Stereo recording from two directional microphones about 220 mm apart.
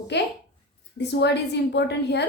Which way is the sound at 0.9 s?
50° left (ahead or behind).